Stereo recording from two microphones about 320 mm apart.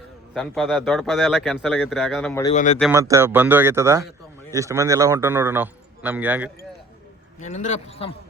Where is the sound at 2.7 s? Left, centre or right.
Centre.